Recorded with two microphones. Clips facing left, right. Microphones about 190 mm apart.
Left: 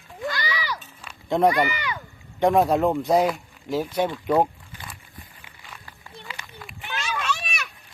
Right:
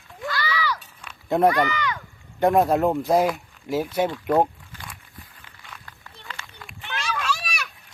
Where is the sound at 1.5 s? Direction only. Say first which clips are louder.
Right 1 dB; 15° left (ahead or behind).